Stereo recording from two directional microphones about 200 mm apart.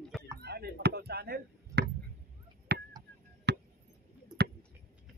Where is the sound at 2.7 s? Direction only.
55° right (ahead or behind).